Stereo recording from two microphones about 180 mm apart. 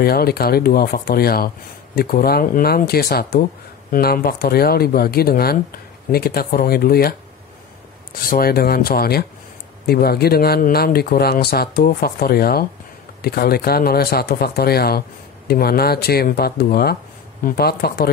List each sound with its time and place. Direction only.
0.0 s speech: 60° left (ahead or behind)